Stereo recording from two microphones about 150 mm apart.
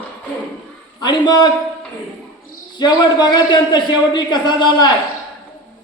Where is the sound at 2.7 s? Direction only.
30° left (ahead or behind).